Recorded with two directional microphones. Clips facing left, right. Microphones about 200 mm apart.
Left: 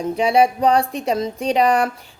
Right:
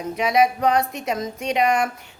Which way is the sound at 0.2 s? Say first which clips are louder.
Left 3 dB; 30° left (ahead or behind).